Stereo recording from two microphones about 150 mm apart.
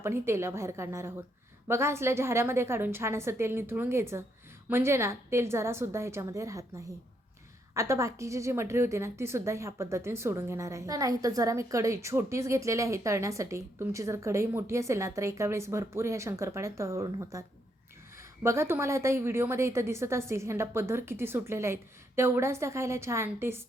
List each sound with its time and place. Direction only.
0.0 s a woman's voice: 15° right (ahead or behind)
18.4 s a woman's voice: 15° right (ahead or behind)